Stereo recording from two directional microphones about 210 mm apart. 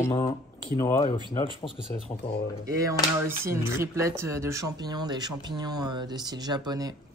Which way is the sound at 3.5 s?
15° right (ahead or behind).